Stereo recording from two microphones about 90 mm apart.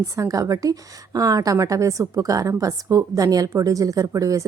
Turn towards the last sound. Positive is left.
turn(degrees=-40)  # may be behind; listen again after turning